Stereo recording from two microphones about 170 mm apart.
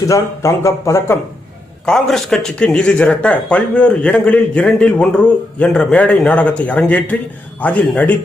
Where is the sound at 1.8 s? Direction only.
5° left (ahead or behind).